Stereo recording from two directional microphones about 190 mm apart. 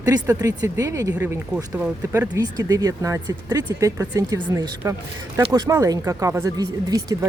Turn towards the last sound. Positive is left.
turn(degrees=-20)  # may be behind; listen again after turning